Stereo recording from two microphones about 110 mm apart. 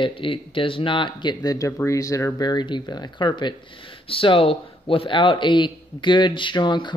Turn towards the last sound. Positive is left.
turn(degrees=45)  # may be behind; listen again after turning